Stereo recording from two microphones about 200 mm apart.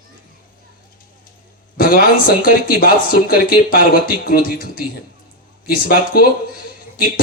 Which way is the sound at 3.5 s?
45° left (ahead or behind).